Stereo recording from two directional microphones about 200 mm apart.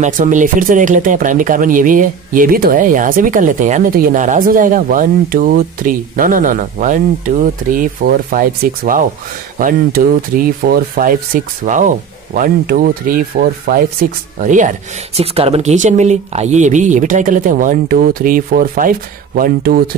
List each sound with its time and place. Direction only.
0.0 s speech: 40° right (ahead or behind)
14.4 s speech: 40° right (ahead or behind)